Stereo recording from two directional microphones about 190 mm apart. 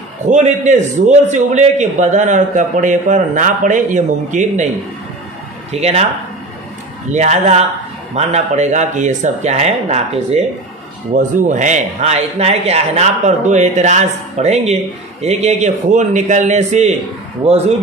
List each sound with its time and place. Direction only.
0.3 s a man's voice: 40° right (ahead or behind)
5.7 s a man's voice: 35° right (ahead or behind)
7.1 s a man's voice: 40° right (ahead or behind)